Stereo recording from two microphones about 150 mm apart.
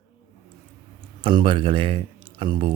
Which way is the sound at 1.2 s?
35° right (ahead or behind).